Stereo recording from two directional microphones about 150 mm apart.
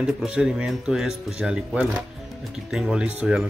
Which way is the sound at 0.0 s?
5° right (ahead or behind).